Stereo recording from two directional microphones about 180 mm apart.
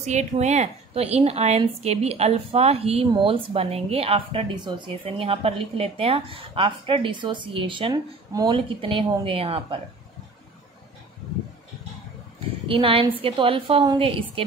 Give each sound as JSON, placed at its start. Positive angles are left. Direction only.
{"t": 0.0, "sound": "a woman's voice", "side_deg": -40}
{"t": 12.6, "sound": "a woman's voice", "side_deg": -30}